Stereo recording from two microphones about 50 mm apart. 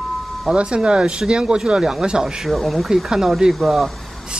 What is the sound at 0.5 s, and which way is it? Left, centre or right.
Speech, right.